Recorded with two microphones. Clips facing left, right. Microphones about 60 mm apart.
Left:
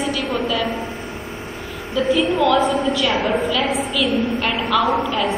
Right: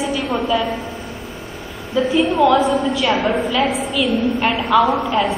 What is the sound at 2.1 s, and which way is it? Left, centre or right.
A woman's voice, centre.